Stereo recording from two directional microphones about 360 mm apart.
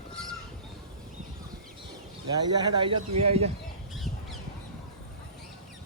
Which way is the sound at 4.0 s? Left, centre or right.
Centre.